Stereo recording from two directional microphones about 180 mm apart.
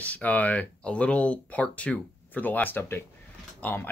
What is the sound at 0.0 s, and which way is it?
Speech, 10° left (ahead or behind).